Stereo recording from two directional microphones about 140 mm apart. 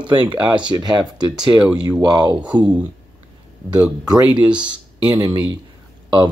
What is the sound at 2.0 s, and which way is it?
Speech, 30° right (ahead or behind).